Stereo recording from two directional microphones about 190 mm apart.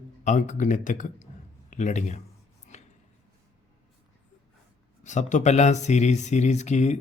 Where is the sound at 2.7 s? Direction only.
35° left (ahead or behind).